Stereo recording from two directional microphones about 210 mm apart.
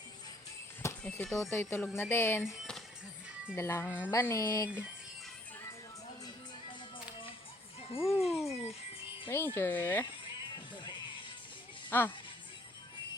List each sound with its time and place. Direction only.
0.8 s speech: 10° left (ahead or behind)
2.5 s music: centre (ahead or behind)
3.5 s speech: 10° left (ahead or behind)
7.9 s a child's voice: 25° left (ahead or behind)
8.3 s music: centre (ahead or behind)
9.3 s speech: 10° left (ahead or behind)
11.9 s speech: 10° left (ahead or behind)